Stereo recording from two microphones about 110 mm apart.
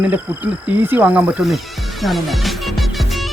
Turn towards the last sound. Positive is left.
turn(degrees=0)  # may be behind; listen again after turning